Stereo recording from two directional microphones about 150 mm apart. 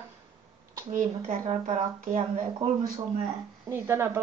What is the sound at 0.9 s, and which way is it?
Speech, 60° right (ahead or behind).